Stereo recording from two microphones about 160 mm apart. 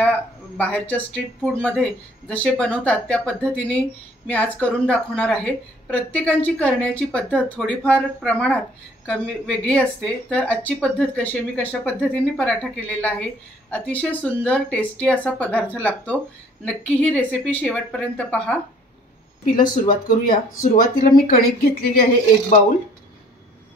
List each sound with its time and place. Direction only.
0.0 s speech: 10° left (ahead or behind)
19.4 s speech: 60° left (ahead or behind)